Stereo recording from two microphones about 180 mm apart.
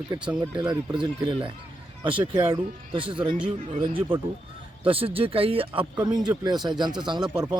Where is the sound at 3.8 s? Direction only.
25° right (ahead or behind).